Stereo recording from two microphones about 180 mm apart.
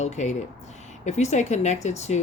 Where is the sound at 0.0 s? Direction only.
40° left (ahead or behind).